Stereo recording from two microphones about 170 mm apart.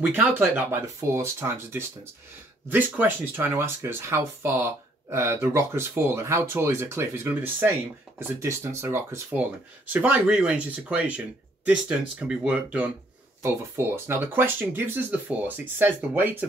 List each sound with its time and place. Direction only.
0.0 s speech: 10° right (ahead or behind)